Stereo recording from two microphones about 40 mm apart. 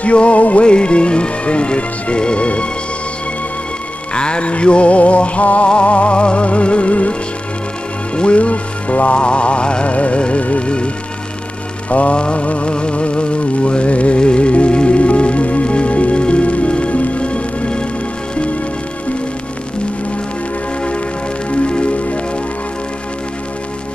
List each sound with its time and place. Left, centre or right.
0.0 s music: left
4.1 s music: left
8.2 s music: left
11.9 s music: left
21.5 s music: left